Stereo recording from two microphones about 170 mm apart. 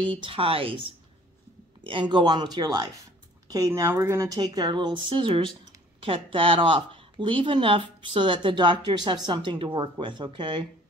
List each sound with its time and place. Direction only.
0.0 s speech: 30° right (ahead or behind)
1.9 s speech: 30° right (ahead or behind)